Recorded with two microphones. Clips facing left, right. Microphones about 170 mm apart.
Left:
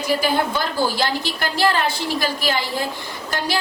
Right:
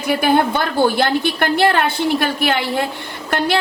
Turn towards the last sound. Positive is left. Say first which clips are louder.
# right 6 dB
turn(degrees=-60)  # may be behind; listen again after turning